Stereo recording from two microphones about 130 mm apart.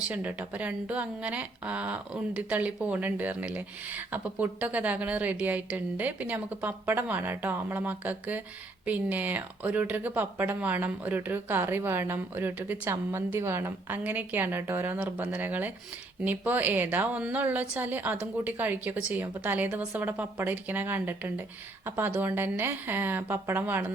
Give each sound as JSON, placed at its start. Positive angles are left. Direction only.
{"t": 0.0, "sound": "speech", "side_deg": -10}